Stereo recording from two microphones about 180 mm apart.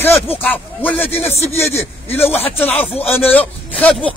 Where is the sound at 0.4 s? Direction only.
10° left (ahead or behind).